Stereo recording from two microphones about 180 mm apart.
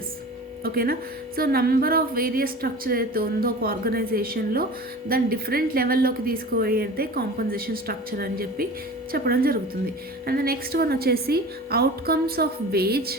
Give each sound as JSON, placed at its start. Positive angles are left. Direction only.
{"t": 0.6, "sound": "a woman's voice", "side_deg": -55}